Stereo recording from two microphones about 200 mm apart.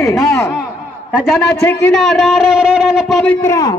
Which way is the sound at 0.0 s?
15° left (ahead or behind).